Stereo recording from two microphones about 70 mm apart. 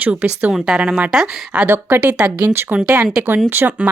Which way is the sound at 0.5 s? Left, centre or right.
Centre.